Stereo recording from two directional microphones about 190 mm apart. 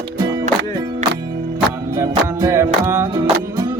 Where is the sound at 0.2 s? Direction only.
20° right (ahead or behind).